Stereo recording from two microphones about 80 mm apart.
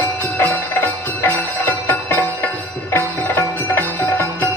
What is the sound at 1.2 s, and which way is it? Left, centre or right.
Music, left.